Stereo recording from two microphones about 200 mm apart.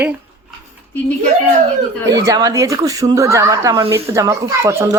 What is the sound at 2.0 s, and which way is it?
Speech, 15° right (ahead or behind).